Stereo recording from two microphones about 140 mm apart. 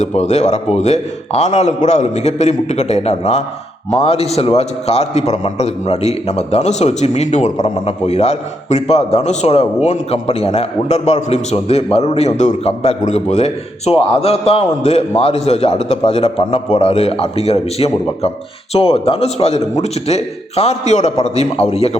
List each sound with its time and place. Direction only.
0.0 s a man's voice: 55° left (ahead or behind)